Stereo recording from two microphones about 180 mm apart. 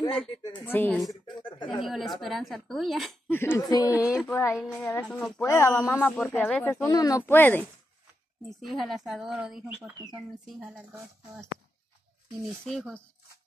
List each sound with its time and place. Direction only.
0.4 s speech: 25° left (ahead or behind)
0.7 s a woman's voice: 10° left (ahead or behind)
3.3 s speech: 10° left (ahead or behind)
3.9 s speech: 5° right (ahead or behind)
4.3 s speech: 15° left (ahead or behind)
6.9 s speech: 20° left (ahead or behind)
8.5 s a woman's voice: centre (ahead or behind)
12.6 s a woman's voice: 5° left (ahead or behind)